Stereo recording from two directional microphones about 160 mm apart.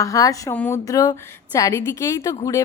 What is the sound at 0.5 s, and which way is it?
Speech, 10° left (ahead or behind).